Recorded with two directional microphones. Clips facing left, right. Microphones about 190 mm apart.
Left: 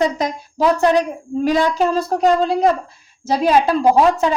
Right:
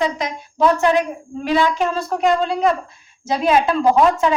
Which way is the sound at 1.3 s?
40° left (ahead or behind).